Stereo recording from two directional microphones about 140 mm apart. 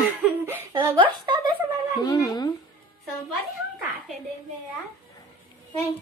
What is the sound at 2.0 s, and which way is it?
Speech, 25° left (ahead or behind).